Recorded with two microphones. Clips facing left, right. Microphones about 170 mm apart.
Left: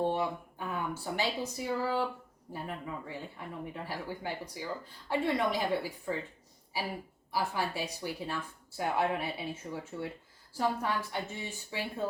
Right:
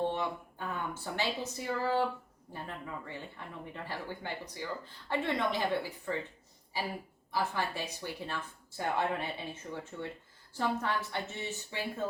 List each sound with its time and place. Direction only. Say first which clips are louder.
0.7 s speech: left 3 dB; 10° left (ahead or behind)
7.3 s speech: left 1 dB; 10° left (ahead or behind)